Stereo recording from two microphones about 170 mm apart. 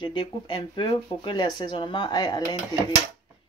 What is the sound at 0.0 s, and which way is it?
A woman's voice, 30° left (ahead or behind).